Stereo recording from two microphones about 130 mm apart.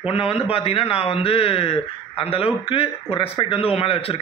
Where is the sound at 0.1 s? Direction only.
45° left (ahead or behind).